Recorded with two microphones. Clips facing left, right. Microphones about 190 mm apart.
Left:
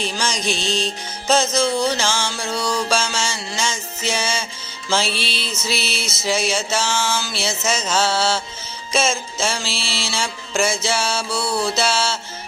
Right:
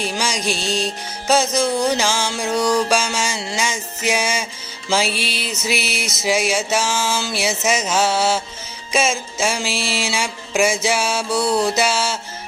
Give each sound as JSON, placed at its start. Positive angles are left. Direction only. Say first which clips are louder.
{"t": 0.0, "sound": "music", "louder": "right 1 dB", "side_deg": -10}